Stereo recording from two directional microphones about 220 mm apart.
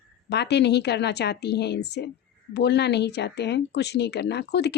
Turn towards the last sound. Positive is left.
turn(degrees=50)  # may be behind; listen again after turning